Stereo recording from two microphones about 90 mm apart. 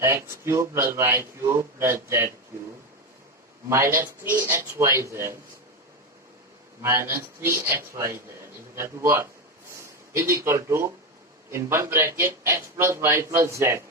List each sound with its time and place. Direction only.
0.0 s a man's voice: 30° right (ahead or behind)
3.7 s a man's voice: 30° right (ahead or behind)
6.8 s a man's voice: 30° right (ahead or behind)